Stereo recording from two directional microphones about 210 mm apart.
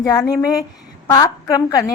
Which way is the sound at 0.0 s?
20° left (ahead or behind).